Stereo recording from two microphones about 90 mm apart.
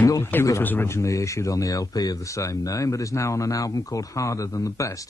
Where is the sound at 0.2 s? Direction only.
25° left (ahead or behind).